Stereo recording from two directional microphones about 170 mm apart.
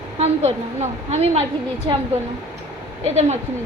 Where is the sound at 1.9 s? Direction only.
30° right (ahead or behind).